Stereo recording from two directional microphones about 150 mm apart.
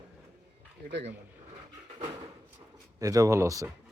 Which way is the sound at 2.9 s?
20° right (ahead or behind).